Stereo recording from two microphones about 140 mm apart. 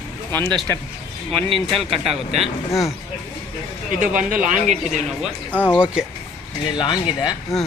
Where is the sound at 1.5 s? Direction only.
40° right (ahead or behind).